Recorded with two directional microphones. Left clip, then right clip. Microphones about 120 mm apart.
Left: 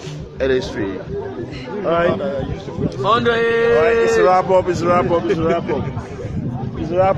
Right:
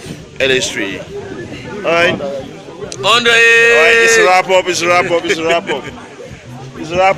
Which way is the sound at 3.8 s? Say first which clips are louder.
Right 5 dB; 40° right (ahead or behind).